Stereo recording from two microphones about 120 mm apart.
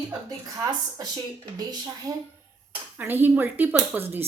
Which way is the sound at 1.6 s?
35° right (ahead or behind).